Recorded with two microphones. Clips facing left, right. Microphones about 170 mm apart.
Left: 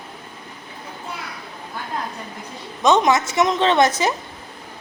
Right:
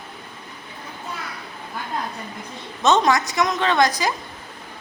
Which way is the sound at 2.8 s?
15° left (ahead or behind).